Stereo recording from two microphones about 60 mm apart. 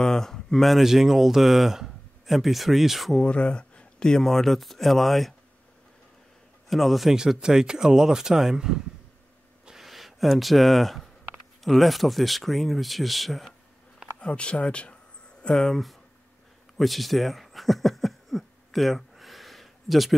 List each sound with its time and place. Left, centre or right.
0.0 s speech: centre
3.2 s speech: centre
6.7 s speech: centre
14.2 s speech: centre
15.4 s speech: centre
16.7 s a sound: centre